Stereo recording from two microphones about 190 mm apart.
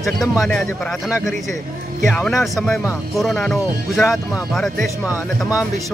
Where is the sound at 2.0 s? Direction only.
5° left (ahead or behind).